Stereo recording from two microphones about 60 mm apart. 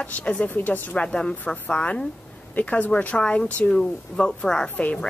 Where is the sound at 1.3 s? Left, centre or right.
Left.